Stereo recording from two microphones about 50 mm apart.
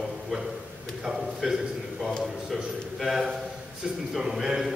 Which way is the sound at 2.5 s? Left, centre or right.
Centre.